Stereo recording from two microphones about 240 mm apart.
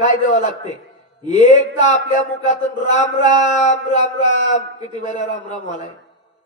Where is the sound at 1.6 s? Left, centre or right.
Left.